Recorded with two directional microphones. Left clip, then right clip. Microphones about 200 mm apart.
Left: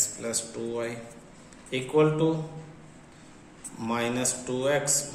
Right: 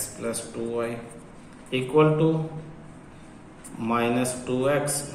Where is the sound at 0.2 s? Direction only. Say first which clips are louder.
Right 2 dB; 30° left (ahead or behind).